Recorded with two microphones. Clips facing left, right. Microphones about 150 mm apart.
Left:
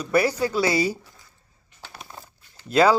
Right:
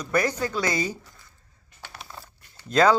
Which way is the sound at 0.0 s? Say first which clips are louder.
Left 3 dB; 10° left (ahead or behind).